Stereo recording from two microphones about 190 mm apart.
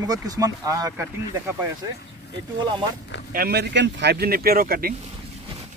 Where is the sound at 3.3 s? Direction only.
55° right (ahead or behind).